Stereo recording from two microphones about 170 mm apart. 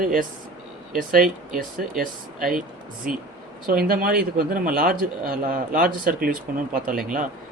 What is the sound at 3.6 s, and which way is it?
A man's voice, 60° right (ahead or behind).